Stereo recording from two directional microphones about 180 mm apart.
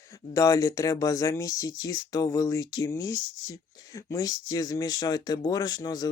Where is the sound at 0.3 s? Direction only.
20° left (ahead or behind).